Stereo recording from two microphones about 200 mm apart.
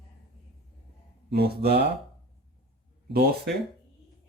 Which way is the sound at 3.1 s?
50° right (ahead or behind).